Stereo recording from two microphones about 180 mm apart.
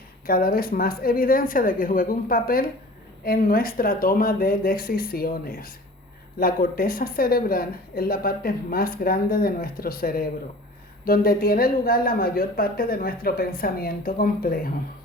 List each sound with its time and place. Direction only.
0.3 s a woman's voice: 55° left (ahead or behind)